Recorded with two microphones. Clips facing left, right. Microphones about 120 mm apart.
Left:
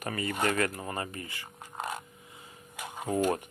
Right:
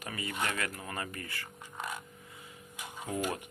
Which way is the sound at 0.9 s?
30° left (ahead or behind).